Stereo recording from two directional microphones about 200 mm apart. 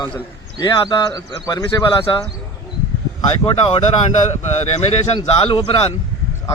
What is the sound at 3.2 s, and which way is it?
Speech, 25° left (ahead or behind).